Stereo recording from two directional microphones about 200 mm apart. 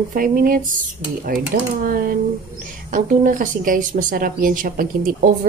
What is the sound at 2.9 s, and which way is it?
Speech, 40° right (ahead or behind).